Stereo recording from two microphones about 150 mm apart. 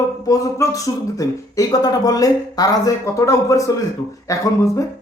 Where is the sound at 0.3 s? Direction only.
20° left (ahead or behind).